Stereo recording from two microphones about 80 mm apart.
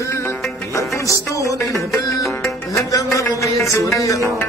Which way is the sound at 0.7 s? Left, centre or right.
Left.